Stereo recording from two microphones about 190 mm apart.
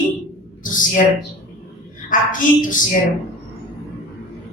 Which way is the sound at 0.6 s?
45° left (ahead or behind).